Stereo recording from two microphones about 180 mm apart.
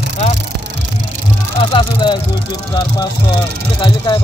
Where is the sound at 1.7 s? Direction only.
25° left (ahead or behind).